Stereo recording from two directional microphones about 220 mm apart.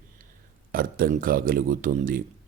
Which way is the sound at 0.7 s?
40° right (ahead or behind).